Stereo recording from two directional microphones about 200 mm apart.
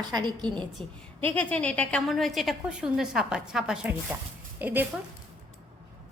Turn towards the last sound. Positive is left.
turn(degrees=-10)  # may be behind; listen again after turning